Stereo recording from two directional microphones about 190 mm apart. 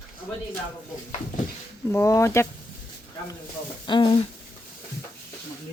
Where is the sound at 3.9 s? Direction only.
25° left (ahead or behind).